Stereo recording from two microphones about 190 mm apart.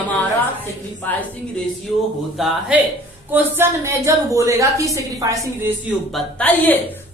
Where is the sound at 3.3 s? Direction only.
15° right (ahead or behind).